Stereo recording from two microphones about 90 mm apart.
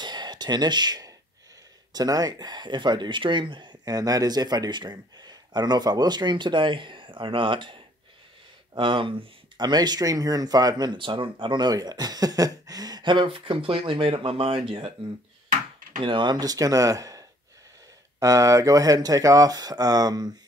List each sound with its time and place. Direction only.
0.0 s a sound: 55° right (ahead or behind)
1.9 s speech: 45° right (ahead or behind); by 3.7 s 60° right (ahead or behind)
3.8 s speech: 45° right (ahead or behind); by 9.1 s 70° right (ahead or behind)
9.6 s speech: 50° right (ahead or behind); by 15.0 s 80° right
16.0 s speech: 65° right (ahead or behind); by 20.3 s 45° right (ahead or behind)